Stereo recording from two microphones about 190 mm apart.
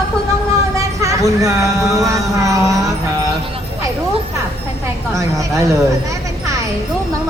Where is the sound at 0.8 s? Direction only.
15° right (ahead or behind).